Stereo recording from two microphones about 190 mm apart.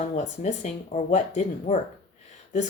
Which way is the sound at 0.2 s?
35° left (ahead or behind).